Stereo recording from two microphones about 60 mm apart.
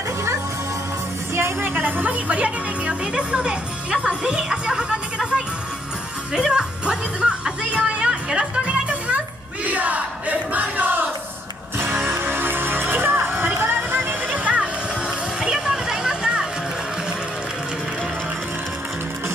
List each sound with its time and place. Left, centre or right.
1.3 s speech: right; by 5.4 s centre
6.3 s music: centre
9.7 s crowd: right
11.8 s music: right; by 16.4 s centre